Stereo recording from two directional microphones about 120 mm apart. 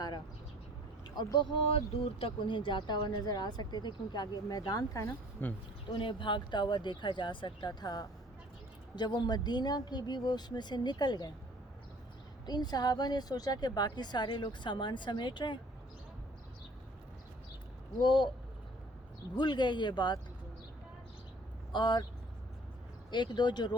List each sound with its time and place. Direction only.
1.1 s speech: 35° left (ahead or behind); by 5.5 s 15° left (ahead or behind)
5.9 s speech: 45° left (ahead or behind)
12.5 s speech: 35° left (ahead or behind)
18.0 s speech: 40° left (ahead or behind)
19.4 s speech: 40° left (ahead or behind)
21.7 s speech: 40° left (ahead or behind)
23.1 s speech: 40° left (ahead or behind)